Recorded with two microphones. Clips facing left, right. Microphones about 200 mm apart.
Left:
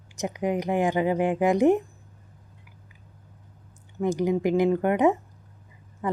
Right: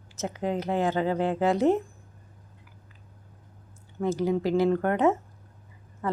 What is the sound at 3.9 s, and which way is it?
A woman's voice, 15° left (ahead or behind).